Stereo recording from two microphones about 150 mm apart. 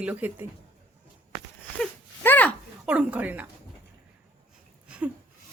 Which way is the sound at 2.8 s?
10° right (ahead or behind).